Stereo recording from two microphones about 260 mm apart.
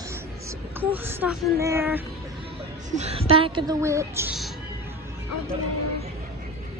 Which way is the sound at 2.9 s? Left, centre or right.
Right.